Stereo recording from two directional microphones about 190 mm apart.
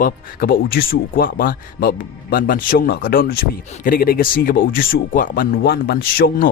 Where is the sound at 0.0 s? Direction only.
50° left (ahead or behind).